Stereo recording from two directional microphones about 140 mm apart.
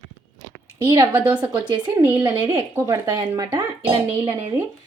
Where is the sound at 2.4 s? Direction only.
35° right (ahead or behind).